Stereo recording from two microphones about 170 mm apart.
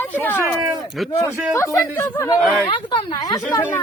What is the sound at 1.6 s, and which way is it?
Speech, 15° left (ahead or behind).